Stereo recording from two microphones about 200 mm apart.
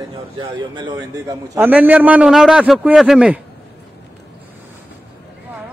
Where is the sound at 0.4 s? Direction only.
25° right (ahead or behind); by 3.3 s 5° right (ahead or behind).